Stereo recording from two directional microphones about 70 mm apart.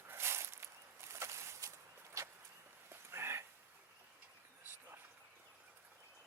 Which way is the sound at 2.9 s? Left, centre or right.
Right.